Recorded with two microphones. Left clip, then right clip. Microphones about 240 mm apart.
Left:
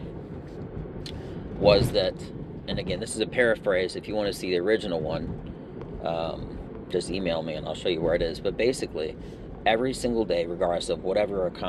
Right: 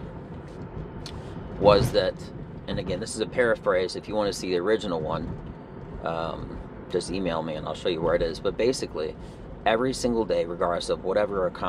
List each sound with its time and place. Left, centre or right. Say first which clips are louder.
1.9 s speech: right 1 dB; centre